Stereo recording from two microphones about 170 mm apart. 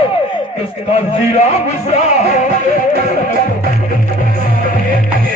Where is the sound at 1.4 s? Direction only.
40° left (ahead or behind).